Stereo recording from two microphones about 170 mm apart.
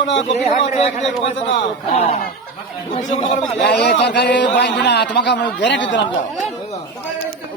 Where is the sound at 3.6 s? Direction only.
85° left.